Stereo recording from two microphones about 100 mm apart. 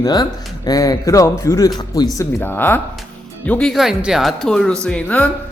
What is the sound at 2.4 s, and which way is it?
Speech, 20° left (ahead or behind).